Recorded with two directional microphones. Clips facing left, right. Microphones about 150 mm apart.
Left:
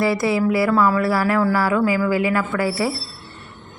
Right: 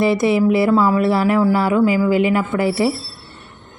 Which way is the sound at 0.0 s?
20° right (ahead or behind).